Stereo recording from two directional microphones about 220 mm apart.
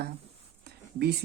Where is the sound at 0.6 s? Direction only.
50° right (ahead or behind).